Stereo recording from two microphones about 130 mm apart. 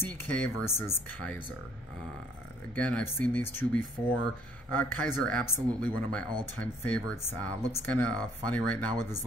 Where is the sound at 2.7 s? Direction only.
10° left (ahead or behind).